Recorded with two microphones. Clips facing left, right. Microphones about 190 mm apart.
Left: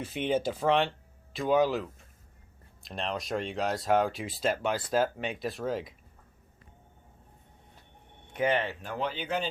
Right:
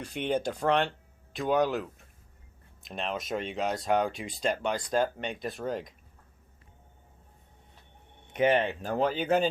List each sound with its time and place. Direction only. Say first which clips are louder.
0.0 s speech: left 1 dB; 5° left (ahead or behind)
8.3 s speech: right 3 dB; 20° right (ahead or behind)
8.8 s speech: right 6 dB; 40° right (ahead or behind)